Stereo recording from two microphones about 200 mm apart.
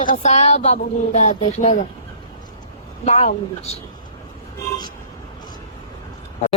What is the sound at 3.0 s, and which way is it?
Speech, 35° left (ahead or behind).